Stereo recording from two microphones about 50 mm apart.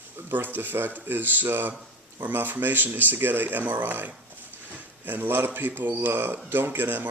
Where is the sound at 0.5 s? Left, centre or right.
Right.